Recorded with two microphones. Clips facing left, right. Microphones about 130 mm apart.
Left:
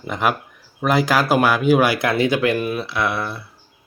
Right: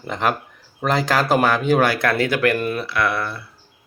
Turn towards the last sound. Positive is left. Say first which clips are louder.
# right 1 dB
turn(degrees=20)  # may be behind; listen again after turning